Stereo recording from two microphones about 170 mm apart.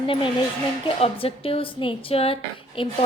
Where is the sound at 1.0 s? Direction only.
35° left (ahead or behind).